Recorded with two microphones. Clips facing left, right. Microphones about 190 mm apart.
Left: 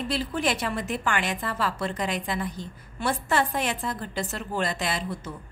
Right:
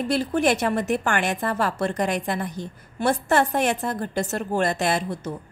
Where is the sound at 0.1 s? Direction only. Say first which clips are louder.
Right 7 dB; 50° right (ahead or behind).